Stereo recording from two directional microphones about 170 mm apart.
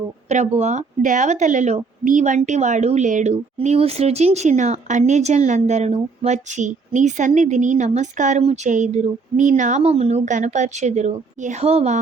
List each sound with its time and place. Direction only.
0.3 s speech: 40° right (ahead or behind)